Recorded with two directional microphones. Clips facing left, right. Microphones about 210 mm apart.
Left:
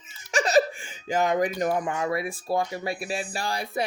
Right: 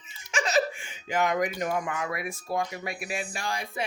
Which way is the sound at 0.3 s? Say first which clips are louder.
Left 5 dB; 35° left (ahead or behind).